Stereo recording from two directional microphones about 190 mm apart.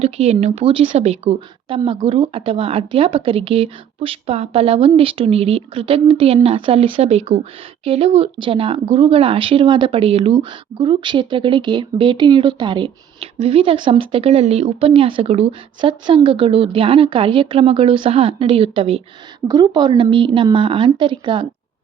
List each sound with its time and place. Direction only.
0.0 s a woman's voice: 35° right (ahead or behind)